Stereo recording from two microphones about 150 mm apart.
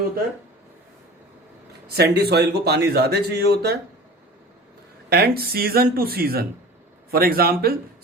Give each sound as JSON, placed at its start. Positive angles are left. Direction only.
{"t": 1.9, "sound": "speech", "side_deg": -90}
{"t": 5.0, "sound": "speech", "side_deg": -90}